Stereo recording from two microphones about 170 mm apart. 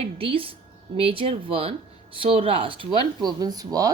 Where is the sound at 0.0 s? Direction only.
35° right (ahead or behind).